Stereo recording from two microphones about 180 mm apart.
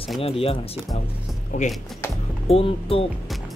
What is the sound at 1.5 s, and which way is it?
Speech, 40° left (ahead or behind).